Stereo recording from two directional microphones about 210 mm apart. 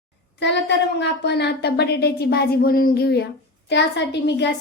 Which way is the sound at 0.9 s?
55° left (ahead or behind).